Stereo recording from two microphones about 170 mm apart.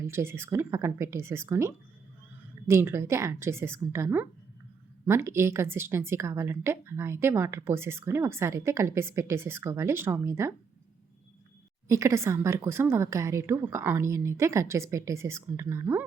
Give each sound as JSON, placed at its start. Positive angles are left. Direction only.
{"t": 0.0, "sound": "a woman's voice", "side_deg": -15}
{"t": 11.9, "sound": "a woman's voice", "side_deg": -15}